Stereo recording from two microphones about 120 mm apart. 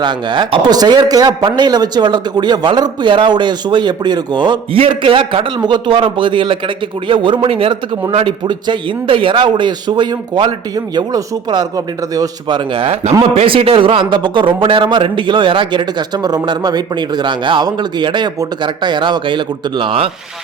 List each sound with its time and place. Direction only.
0.0 s a man's voice: 40° right (ahead or behind)